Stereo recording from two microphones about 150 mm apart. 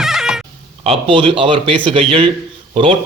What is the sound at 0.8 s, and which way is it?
Speech, 35° right (ahead or behind).